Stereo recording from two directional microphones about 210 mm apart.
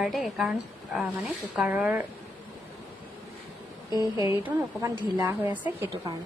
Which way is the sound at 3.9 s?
15° right (ahead or behind).